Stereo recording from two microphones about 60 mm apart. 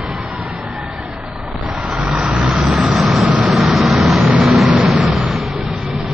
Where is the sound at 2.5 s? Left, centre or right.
Centre.